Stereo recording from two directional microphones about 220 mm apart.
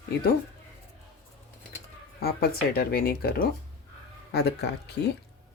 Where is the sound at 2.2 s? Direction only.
45° left (ahead or behind).